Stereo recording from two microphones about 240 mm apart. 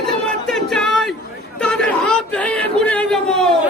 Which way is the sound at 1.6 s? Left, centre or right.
Centre.